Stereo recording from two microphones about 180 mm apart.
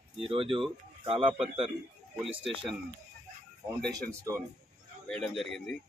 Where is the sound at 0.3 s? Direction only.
30° right (ahead or behind).